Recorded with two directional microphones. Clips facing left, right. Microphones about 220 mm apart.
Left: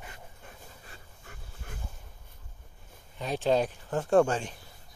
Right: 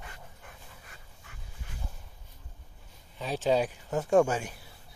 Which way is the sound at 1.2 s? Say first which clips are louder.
Left 3 dB; 45° left (ahead or behind).